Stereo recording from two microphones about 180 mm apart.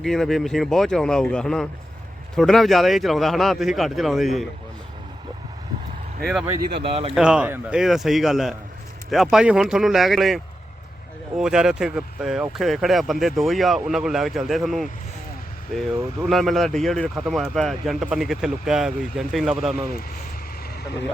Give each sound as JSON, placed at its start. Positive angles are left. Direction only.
{"t": 0.0, "sound": "speech", "side_deg": 0}
{"t": 6.8, "sound": "speech", "side_deg": -35}
{"t": 7.1, "sound": "speech", "side_deg": -5}